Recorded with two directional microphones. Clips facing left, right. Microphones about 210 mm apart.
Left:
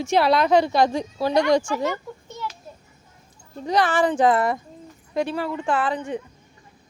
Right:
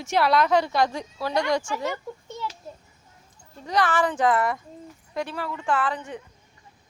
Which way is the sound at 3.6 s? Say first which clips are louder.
Left 3 dB; 30° left (ahead or behind).